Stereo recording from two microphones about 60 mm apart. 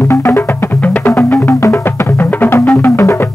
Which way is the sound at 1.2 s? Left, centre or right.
Left.